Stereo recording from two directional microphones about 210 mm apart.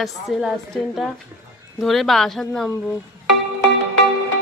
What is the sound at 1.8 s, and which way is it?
Speech, centre (ahead or behind).